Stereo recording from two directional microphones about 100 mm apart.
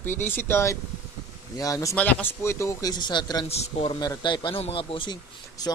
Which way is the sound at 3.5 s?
90° left.